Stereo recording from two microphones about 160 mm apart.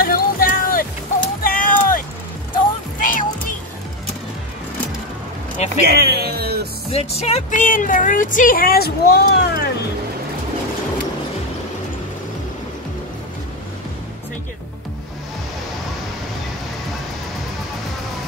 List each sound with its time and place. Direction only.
0.0 s a sound: 65° left (ahead or behind)
3.0 s music: 55° left (ahead or behind)
5.9 s speech: 85° right
6.9 s speech: 40° left (ahead or behind); by 9.7 s 85° left